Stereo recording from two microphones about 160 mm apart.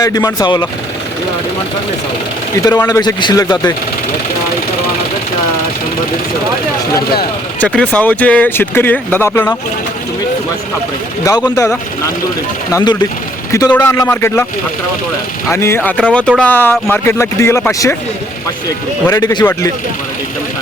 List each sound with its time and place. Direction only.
0.0 s a man's voice: 20° left (ahead or behind)
2.7 s a man's voice: 20° left (ahead or behind)
7.6 s speech: 5° left (ahead or behind)
11.3 s a man's voice: 25° left (ahead or behind)
15.4 s speech: 15° left (ahead or behind)
19.1 s a man's voice: 25° left (ahead or behind)